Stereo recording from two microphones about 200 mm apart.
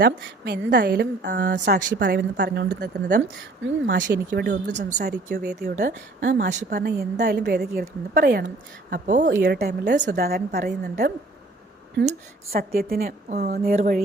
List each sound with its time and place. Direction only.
0.0 s a woman's voice: 55° right (ahead or behind)
3.2 s speech: 70° right (ahead or behind)
4.0 s a woman's voice: 45° right (ahead or behind)
5.7 s a woman's voice: 40° right (ahead or behind)
8.4 s speech: 40° right (ahead or behind)
9.4 s a woman's voice: 55° right (ahead or behind)
12.5 s a woman's voice: 50° right (ahead or behind)